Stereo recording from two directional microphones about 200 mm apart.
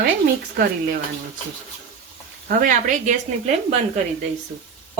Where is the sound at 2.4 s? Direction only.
40° right (ahead or behind).